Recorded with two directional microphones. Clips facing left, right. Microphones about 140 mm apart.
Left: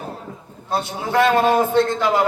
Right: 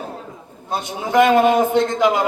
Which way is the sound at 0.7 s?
15° right (ahead or behind).